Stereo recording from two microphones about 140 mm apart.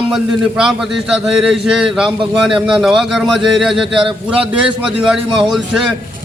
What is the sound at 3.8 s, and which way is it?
Speech, 35° right (ahead or behind).